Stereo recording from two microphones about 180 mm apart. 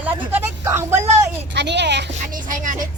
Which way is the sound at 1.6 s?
70° right (ahead or behind).